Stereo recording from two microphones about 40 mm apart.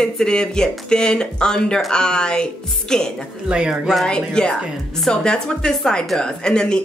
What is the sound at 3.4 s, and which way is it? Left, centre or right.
Speech, right.